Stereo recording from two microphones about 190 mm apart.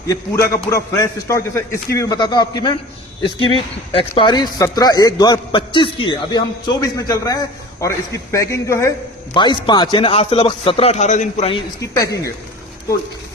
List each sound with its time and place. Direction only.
0.1 s a man's voice: 15° left (ahead or behind); by 11.6 s 35° left (ahead or behind)
11.8 s a man's voice: 15° left (ahead or behind)